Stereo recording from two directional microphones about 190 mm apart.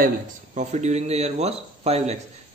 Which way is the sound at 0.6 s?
35° right (ahead or behind).